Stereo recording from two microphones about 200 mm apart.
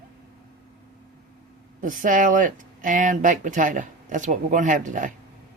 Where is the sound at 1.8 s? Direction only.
40° right (ahead or behind).